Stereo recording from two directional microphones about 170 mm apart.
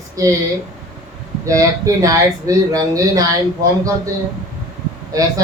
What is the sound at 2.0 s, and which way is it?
Speech, 20° right (ahead or behind).